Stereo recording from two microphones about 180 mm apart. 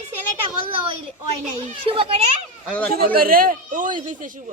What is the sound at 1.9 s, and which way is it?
Speech, 30° right (ahead or behind).